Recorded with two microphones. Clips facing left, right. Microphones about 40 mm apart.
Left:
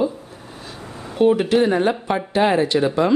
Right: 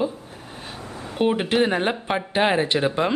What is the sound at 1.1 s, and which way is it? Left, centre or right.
Speech, right.